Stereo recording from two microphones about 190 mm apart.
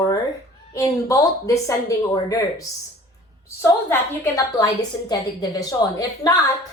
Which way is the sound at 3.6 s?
10° left (ahead or behind).